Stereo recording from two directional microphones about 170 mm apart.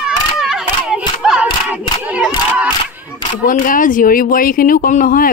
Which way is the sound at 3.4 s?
50° left (ahead or behind).